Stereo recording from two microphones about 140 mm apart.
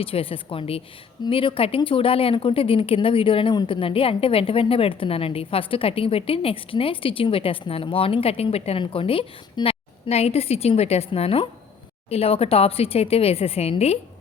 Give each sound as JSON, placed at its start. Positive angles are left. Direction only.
{"t": 0.0, "sound": "speech", "side_deg": 40}